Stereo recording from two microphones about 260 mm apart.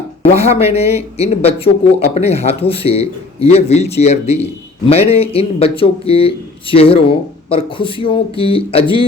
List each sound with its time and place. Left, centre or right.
0.3 s a man's voice: left